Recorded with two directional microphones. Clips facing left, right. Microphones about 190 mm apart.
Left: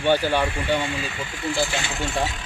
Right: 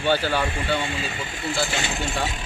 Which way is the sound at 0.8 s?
25° right (ahead or behind).